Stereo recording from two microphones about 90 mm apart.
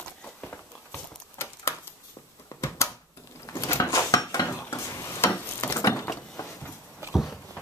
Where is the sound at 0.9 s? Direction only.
30° left (ahead or behind).